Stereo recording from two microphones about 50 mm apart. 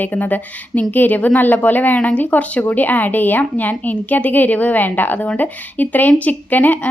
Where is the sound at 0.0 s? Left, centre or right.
Left.